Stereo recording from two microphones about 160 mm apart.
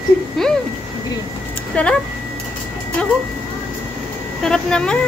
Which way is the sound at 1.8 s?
10° left (ahead or behind).